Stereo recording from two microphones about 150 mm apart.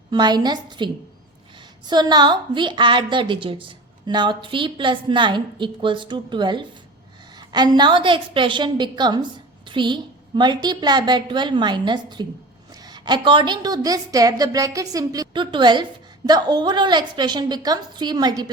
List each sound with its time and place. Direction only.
0.1 s a woman's voice: 30° right (ahead or behind)
1.9 s a woman's voice: 30° right (ahead or behind)